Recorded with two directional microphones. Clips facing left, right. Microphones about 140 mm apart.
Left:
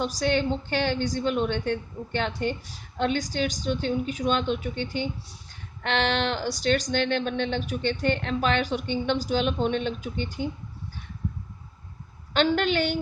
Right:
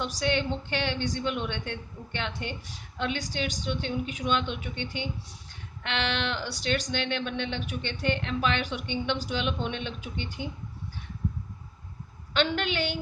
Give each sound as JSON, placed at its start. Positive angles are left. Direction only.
{"t": 0.0, "sound": "speech", "side_deg": 40}
{"t": 12.3, "sound": "a woman's voice", "side_deg": 40}